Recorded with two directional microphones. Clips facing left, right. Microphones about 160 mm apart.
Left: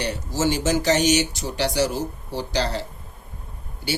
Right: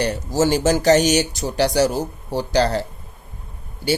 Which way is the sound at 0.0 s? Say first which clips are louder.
Right 5 dB; 40° right (ahead or behind).